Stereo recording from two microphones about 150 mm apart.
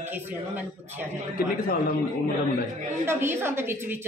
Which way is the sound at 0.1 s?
10° right (ahead or behind).